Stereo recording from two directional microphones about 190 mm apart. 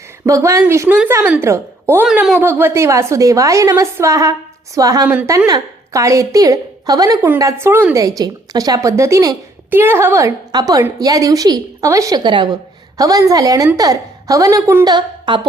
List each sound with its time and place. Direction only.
0.3 s a woman's voice: 15° right (ahead or behind)
15.3 s a woman's voice: 25° right (ahead or behind)